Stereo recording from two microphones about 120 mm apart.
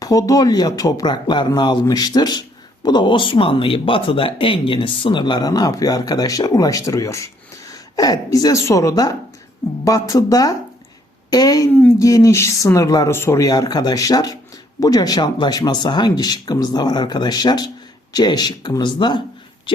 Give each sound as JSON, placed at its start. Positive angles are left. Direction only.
{"t": 0.0, "sound": "speech", "side_deg": 30}